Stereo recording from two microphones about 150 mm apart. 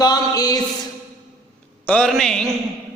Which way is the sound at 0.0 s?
25° left (ahead or behind).